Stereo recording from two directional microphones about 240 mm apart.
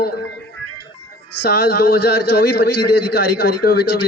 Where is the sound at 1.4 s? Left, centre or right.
Left.